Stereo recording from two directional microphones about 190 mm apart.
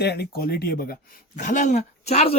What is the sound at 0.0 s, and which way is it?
Speech, 60° left (ahead or behind).